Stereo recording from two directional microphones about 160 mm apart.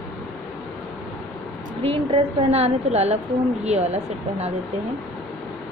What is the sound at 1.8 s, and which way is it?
A woman's voice, 35° right (ahead or behind).